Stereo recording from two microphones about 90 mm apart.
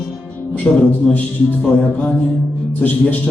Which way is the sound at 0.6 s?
5° right (ahead or behind).